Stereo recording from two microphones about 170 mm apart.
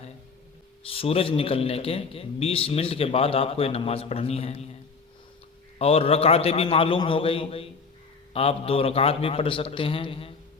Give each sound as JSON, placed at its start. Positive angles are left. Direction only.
{"t": 0.9, "sound": "a man's voice", "side_deg": 35}
{"t": 5.8, "sound": "a man's voice", "side_deg": 35}